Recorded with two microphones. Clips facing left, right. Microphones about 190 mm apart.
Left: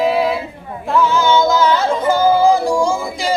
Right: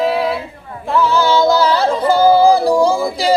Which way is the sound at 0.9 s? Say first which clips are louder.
Even; centre (ahead or behind).